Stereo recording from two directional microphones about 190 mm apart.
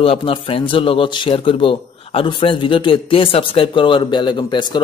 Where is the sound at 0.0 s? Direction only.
30° left (ahead or behind).